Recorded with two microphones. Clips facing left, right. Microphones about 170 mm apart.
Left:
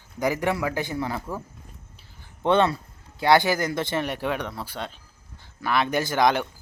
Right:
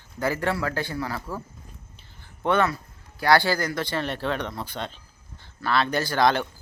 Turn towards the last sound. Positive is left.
turn(degrees=15)  # may be behind; listen again after turning